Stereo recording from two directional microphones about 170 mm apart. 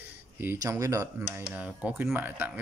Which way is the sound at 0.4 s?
15° right (ahead or behind).